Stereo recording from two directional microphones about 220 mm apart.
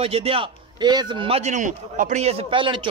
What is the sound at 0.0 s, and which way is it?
A man's voice, 25° right (ahead or behind).